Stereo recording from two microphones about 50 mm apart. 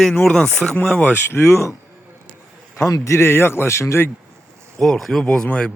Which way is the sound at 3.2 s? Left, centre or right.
Left.